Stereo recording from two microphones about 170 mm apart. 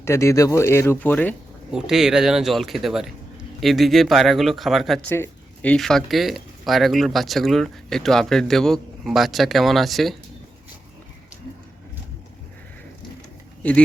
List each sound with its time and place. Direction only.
0.0 s speech: 15° left (ahead or behind)
1.7 s speech: 5° right (ahead or behind)
5.0 s speech: 10° left (ahead or behind)
13.6 s speech: 10° left (ahead or behind)